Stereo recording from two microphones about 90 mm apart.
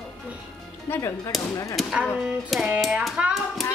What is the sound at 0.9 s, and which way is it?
Music, 25° left (ahead or behind).